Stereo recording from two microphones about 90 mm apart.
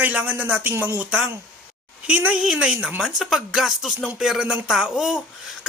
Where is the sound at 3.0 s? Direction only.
5° right (ahead or behind).